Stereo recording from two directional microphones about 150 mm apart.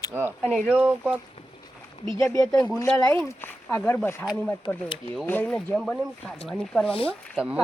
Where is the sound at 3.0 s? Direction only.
15° left (ahead or behind).